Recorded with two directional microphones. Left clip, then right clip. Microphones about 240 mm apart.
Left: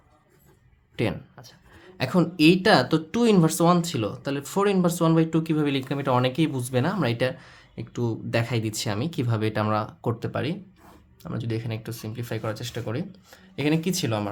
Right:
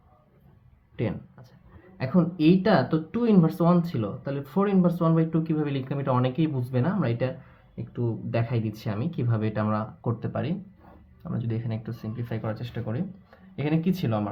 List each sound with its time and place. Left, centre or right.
0.9 s speech: left